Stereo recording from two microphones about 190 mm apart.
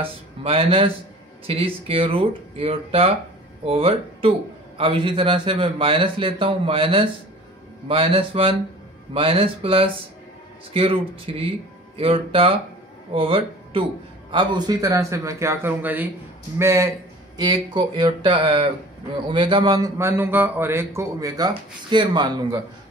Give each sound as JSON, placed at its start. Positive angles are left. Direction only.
{"t": 0.0, "sound": "a man's voice", "side_deg": -30}